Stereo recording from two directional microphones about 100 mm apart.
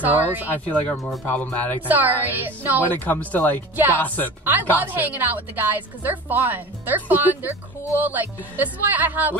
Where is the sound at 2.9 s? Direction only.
15° left (ahead or behind).